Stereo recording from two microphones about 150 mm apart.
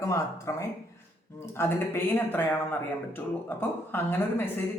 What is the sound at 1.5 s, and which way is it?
A man's voice, 15° left (ahead or behind).